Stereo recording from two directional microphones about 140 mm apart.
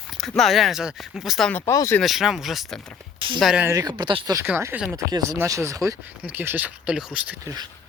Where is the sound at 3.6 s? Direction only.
25° right (ahead or behind).